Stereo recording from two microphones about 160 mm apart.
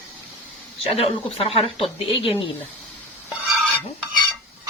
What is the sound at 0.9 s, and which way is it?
A woman's voice, 35° left (ahead or behind).